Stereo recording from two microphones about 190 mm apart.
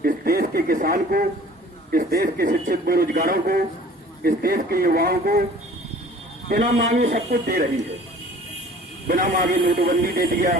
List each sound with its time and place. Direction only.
0.0 s a man's voice: 55° right (ahead or behind)
6.5 s a man's voice: 50° right (ahead or behind)
9.0 s a man's voice: 50° right (ahead or behind)